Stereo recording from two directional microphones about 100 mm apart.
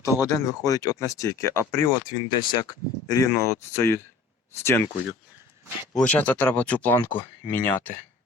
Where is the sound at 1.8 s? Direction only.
40° left (ahead or behind).